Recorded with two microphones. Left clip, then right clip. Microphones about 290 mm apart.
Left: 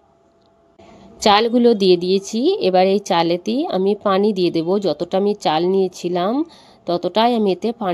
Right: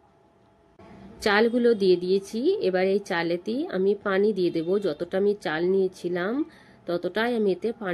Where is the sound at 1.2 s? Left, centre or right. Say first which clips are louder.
Left 8 dB; left.